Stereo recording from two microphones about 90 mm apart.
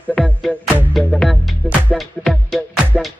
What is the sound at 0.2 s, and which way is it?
Music, centre (ahead or behind).